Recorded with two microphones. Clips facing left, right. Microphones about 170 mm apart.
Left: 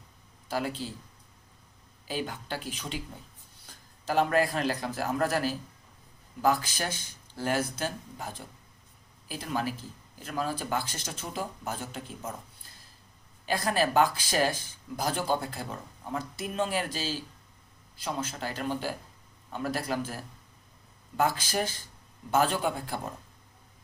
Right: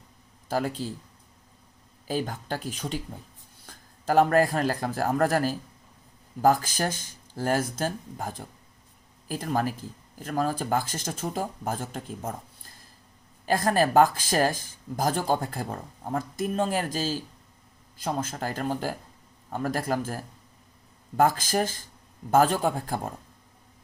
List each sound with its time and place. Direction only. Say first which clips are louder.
0.4 s speech: right 4 dB; 45° right (ahead or behind)
2.0 s a man's voice: right 4 dB; 40° right (ahead or behind)
13.4 s speech: right 4 dB; 50° right (ahead or behind)